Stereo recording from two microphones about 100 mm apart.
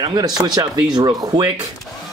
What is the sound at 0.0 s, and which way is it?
Speech, 40° right (ahead or behind).